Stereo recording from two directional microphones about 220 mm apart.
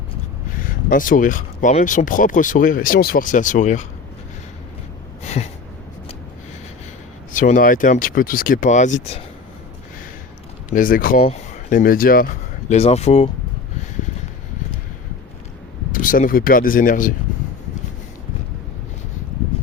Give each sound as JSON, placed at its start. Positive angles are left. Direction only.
{"t": 0.5, "sound": "speech", "side_deg": 40}
{"t": 7.3, "sound": "speech", "side_deg": 35}
{"t": 10.7, "sound": "speech", "side_deg": 40}
{"t": 15.9, "sound": "speech", "side_deg": 40}